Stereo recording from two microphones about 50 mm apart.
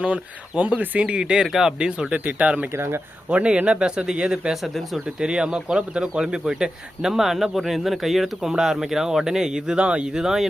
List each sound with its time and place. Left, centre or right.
0.0 s speech: right
1.2 s speech: centre
2.1 s speech: right
4.5 s speech: centre
5.0 s speech: centre